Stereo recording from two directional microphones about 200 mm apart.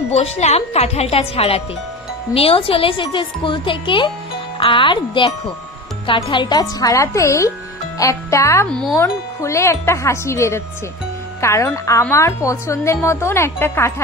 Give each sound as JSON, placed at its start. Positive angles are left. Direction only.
{"t": 0.1, "sound": "speech", "side_deg": 30}